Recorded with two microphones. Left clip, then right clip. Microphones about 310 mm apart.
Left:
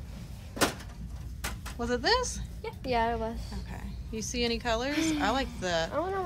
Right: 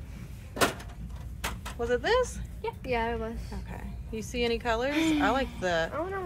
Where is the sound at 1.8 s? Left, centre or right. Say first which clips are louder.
Right 2 dB; centre.